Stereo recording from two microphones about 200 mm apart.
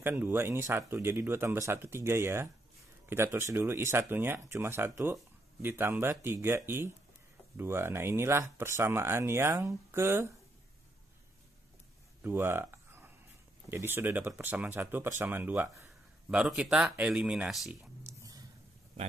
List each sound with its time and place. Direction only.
0.0 s speech: 10° right (ahead or behind)
12.2 s a sound: 10° right (ahead or behind)
13.7 s speech: 10° right (ahead or behind)
18.0 s whispering: 15° right (ahead or behind)